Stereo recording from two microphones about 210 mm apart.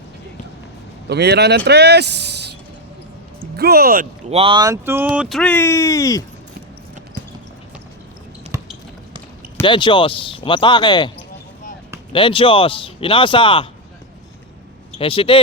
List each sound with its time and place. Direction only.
1.0 s speech: 50° right (ahead or behind)
3.6 s speech: 45° right (ahead or behind)
4.3 s speech: 25° right (ahead or behind); by 6.2 s 15° left (ahead or behind)
8.5 s a sound: 15° right (ahead or behind)
9.6 s a man's voice: 20° left (ahead or behind)
12.1 s a man's voice: 25° left (ahead or behind)
14.9 s speech: 25° left (ahead or behind)